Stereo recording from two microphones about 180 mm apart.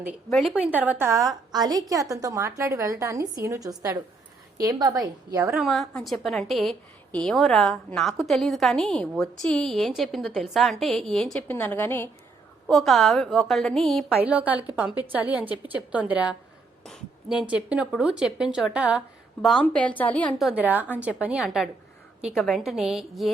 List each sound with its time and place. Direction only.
0.3 s a woman's voice: centre (ahead or behind); by 5.5 s 20° right (ahead or behind)
5.5 s a woman's voice: centre (ahead or behind)
12.6 s a woman's voice: centre (ahead or behind)
20.6 s a woman's voice: 10° right (ahead or behind)